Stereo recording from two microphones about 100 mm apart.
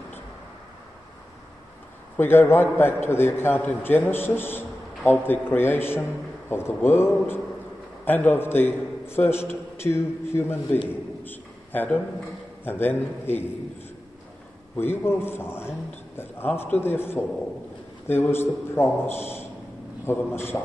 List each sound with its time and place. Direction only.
2.1 s a man's voice: 20° left (ahead or behind)
10.9 s a sound: 20° left (ahead or behind)
12.6 s a man's voice: 20° left (ahead or behind)
14.8 s a man's voice: 20° left (ahead or behind)